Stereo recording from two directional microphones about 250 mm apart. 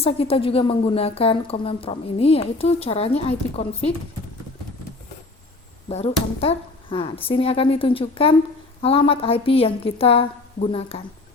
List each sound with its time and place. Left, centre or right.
0.0 s a woman's voice: left
5.9 s a woman's voice: left